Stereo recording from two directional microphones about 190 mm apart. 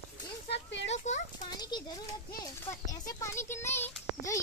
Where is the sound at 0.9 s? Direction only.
35° left (ahead or behind).